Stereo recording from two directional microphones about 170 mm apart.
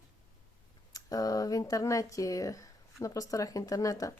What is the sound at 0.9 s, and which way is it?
Speech, 20° left (ahead or behind).